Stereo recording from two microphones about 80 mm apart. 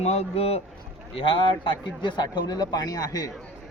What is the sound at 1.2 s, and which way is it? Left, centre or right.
A man's voice, left.